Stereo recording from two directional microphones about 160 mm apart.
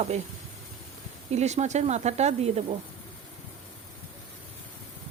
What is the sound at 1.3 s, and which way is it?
Speech, 45° right (ahead or behind).